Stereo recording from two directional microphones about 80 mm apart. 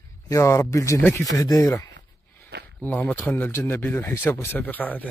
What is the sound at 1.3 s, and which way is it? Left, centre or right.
Speech, left.